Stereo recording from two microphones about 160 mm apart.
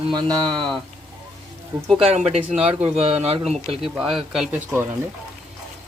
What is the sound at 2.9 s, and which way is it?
Speech, 40° right (ahead or behind).